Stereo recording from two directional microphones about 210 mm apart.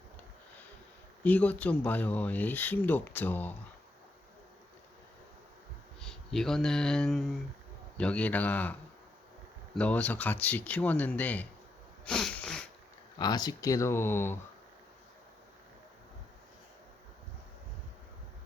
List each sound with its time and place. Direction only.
1.2 s speech: 5° left (ahead or behind)
6.0 s speech: 5° left (ahead or behind)
9.7 s speech: 5° left (ahead or behind)
12.0 s sneeze: 5° left (ahead or behind)
13.1 s speech: 20° left (ahead or behind)